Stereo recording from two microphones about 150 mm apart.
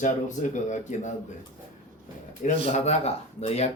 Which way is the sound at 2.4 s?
55° left (ahead or behind).